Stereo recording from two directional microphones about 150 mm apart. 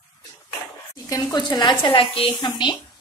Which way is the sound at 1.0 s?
25° left (ahead or behind).